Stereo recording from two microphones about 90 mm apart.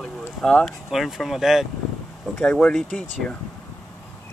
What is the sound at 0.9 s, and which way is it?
Speech, centre (ahead or behind).